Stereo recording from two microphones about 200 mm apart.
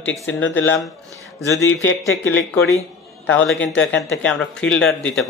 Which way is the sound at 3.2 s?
5° left (ahead or behind).